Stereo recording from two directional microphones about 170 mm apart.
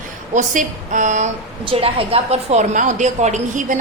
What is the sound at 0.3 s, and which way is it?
Speech, 45° right (ahead or behind).